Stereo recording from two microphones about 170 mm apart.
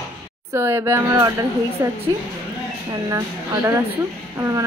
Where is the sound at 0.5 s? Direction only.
15° right (ahead or behind).